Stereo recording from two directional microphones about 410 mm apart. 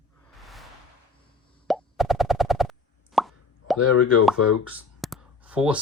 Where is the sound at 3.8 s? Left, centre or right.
Left.